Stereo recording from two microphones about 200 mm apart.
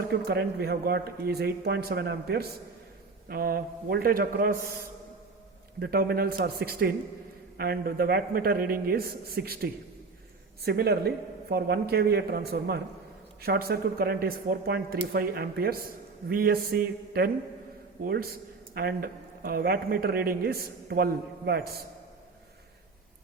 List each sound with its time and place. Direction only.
0.1 s a man's voice: 50° right (ahead or behind)
5.8 s a man's voice: 50° right (ahead or behind)